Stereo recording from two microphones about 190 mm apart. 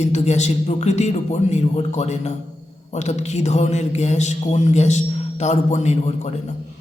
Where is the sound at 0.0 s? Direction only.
35° left (ahead or behind).